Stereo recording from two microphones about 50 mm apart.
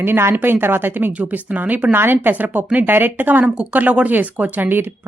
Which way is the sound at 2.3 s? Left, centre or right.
Right.